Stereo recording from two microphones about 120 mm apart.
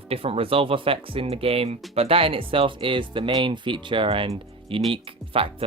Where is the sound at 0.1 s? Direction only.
55° right (ahead or behind).